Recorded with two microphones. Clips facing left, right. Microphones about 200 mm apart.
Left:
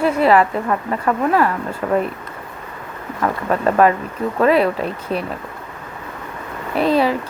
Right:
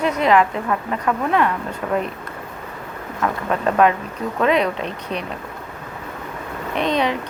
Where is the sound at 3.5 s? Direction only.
5° left (ahead or behind).